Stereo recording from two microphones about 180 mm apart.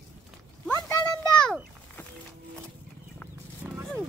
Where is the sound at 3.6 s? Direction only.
10° right (ahead or behind).